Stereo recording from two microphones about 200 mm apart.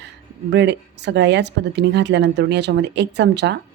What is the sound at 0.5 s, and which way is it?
Speech, 60° right (ahead or behind).